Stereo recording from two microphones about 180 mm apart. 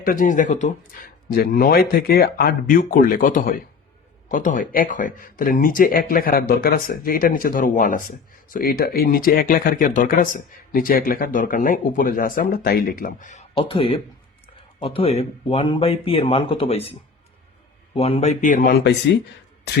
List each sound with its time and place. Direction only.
0.0 s speech: 50° left (ahead or behind)
13.5 s speech: 30° left (ahead or behind)
17.9 s speech: 30° left (ahead or behind); by 18.8 s 50° left (ahead or behind)